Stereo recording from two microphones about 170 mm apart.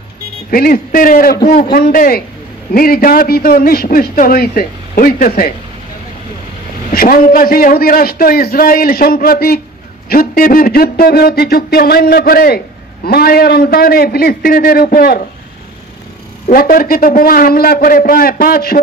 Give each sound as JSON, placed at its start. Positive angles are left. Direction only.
{"t": 0.5, "sound": "a man's voice", "side_deg": 60}
{"t": 6.9, "sound": "a man's voice", "side_deg": 60}
{"t": 16.5, "sound": "a man's voice", "side_deg": 60}